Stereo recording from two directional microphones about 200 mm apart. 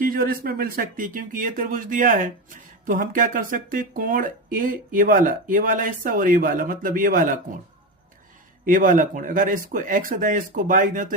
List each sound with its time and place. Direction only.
0.0 s speech: 45° right (ahead or behind)
8.6 s speech: 40° right (ahead or behind)